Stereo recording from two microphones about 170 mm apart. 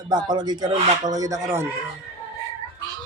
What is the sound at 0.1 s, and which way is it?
Speech, 25° right (ahead or behind).